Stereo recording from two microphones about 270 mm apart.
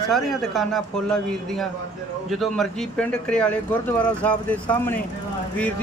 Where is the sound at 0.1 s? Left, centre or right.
Centre.